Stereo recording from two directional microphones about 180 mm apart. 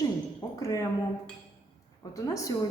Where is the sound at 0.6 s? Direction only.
20° left (ahead or behind).